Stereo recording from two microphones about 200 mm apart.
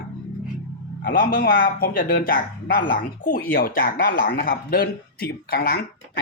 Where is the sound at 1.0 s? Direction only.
45° left (ahead or behind).